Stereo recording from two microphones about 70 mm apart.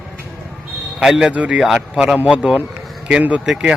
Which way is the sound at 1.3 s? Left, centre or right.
Centre.